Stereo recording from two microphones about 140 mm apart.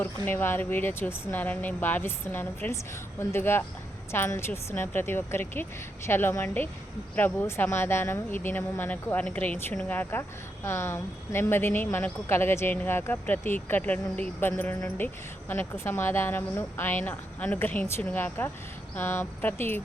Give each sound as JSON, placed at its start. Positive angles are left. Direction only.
{"t": 0.0, "sound": "a woman's voice", "side_deg": 15}